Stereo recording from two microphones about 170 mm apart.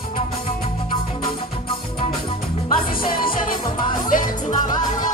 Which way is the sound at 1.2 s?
30° left (ahead or behind).